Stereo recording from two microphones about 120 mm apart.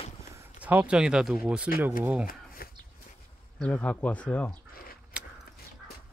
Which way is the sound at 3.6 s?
10° left (ahead or behind).